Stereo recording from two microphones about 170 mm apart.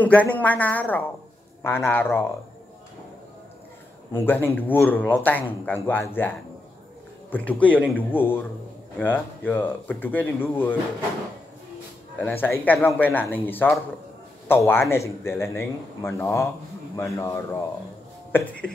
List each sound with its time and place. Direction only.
0.0 s a man's voice: 10° left (ahead or behind)
4.1 s a man's voice: 10° left (ahead or behind)
12.2 s a man's voice: 10° left (ahead or behind)